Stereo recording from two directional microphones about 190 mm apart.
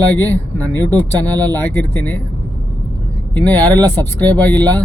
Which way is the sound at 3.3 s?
10° left (ahead or behind).